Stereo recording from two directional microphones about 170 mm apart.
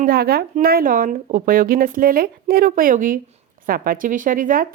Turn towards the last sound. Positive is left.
turn(degrees=-55)  # may be behind; listen again after turning